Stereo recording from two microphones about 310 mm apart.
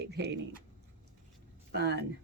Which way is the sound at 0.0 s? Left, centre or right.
Right.